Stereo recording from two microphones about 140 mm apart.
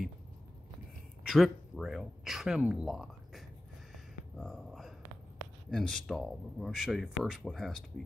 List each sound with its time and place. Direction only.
1.2 s speech: centre (ahead or behind)
3.9 s music: centre (ahead or behind)
5.7 s speech: 5° left (ahead or behind)